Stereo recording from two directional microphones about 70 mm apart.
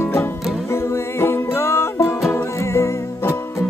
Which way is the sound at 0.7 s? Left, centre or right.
Left.